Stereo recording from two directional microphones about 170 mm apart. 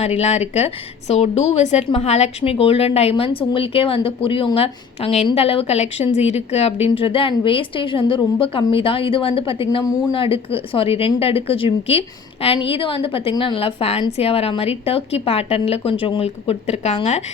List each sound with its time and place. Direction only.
0.0 s a woman's voice: 40° left (ahead or behind)